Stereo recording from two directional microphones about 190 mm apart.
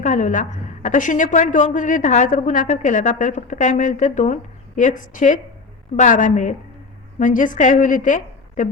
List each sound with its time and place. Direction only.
0.0 s a woman's voice: 40° left (ahead or behind)